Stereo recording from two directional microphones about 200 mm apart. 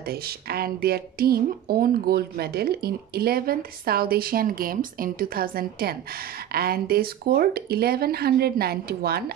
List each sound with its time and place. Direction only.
0.0 s speech: 50° right (ahead or behind)